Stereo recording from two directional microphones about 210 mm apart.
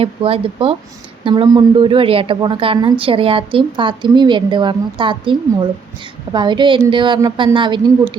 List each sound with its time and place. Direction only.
0.0 s a woman's voice: 25° right (ahead or behind)